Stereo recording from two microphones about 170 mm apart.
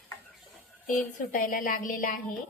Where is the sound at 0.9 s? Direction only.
50° left (ahead or behind).